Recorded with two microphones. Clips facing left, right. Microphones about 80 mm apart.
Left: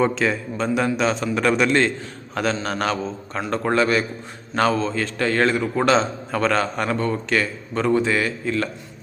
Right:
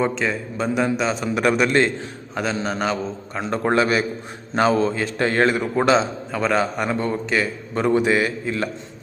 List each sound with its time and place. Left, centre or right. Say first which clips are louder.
0.0 s a man's voice: left 2 dB; centre
3.4 s a man's voice: right 1 dB; right
5.8 s a man's voice: right 1 dB; centre